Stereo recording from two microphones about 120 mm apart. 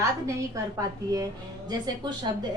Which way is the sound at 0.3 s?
25° right (ahead or behind).